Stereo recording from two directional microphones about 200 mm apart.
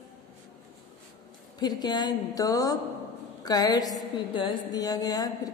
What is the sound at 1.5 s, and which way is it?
A woman's voice, 20° left (ahead or behind).